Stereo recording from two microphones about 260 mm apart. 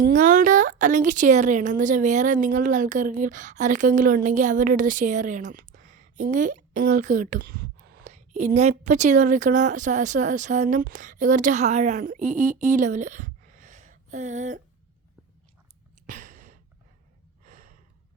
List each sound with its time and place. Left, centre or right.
0.0 s speech: right
16.0 s a sound: right
17.4 s gasp: right